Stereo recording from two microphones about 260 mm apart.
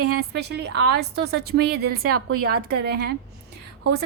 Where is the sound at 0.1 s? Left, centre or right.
Right.